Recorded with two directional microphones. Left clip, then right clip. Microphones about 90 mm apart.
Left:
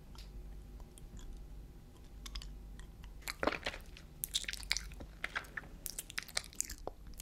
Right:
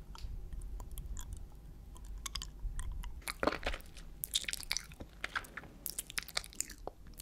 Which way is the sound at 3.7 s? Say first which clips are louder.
Right 3 dB; 25° right (ahead or behind).